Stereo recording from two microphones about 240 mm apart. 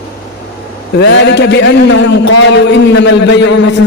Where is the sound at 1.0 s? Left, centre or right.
Left.